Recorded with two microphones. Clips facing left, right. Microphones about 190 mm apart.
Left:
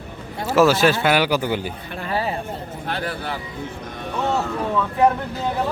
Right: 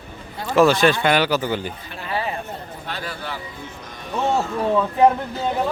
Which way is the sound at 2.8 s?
55° left (ahead or behind).